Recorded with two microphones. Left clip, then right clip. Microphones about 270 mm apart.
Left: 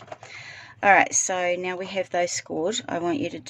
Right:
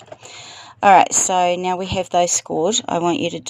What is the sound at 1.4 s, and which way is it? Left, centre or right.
Speech, right.